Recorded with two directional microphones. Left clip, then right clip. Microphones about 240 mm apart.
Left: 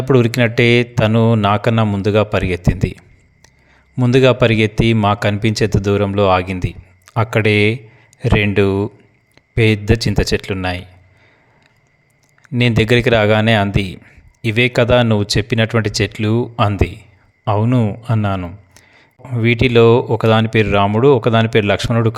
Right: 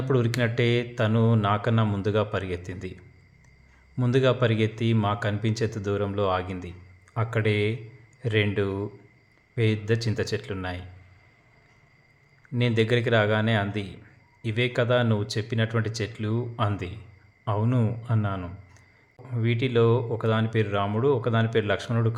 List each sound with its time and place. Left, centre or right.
0.0 s a man's voice: left
12.4 s a man's voice: left